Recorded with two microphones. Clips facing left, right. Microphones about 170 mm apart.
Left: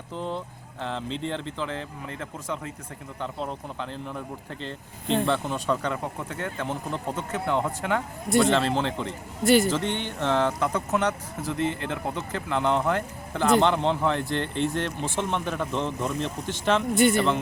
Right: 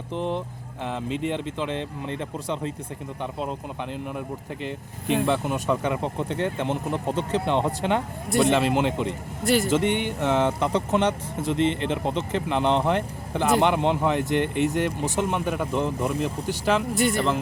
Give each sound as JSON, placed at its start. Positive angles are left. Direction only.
{"t": 0.1, "sound": "speech", "side_deg": -20}
{"t": 3.9, "sound": "speech", "side_deg": -15}
{"t": 9.4, "sound": "speech", "side_deg": 0}
{"t": 9.6, "sound": "speech", "side_deg": -20}